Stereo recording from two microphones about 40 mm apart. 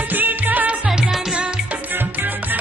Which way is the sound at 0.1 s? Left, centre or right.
Right.